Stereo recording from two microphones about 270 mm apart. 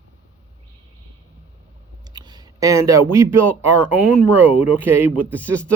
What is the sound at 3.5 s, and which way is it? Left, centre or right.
Speech, right.